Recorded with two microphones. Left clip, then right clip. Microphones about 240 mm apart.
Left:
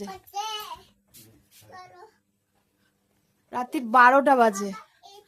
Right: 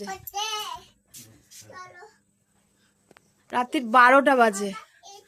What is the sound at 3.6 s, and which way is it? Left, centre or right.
A woman's voice, centre.